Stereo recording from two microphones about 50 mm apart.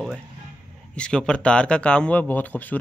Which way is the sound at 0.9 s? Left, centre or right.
Centre.